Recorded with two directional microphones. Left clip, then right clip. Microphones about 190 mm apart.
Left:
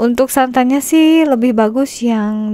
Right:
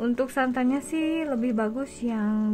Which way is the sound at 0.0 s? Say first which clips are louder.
Left 13 dB; 45° left (ahead or behind).